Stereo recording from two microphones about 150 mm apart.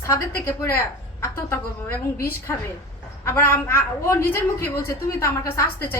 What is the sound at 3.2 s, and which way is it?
A woman's voice, 15° left (ahead or behind).